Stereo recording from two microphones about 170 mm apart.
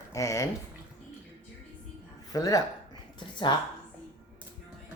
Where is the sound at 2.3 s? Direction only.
20° left (ahead or behind).